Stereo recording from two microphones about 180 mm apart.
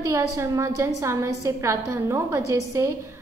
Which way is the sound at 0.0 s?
15° right (ahead or behind).